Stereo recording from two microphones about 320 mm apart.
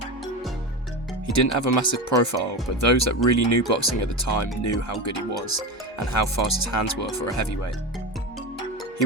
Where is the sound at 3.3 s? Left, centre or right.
Left.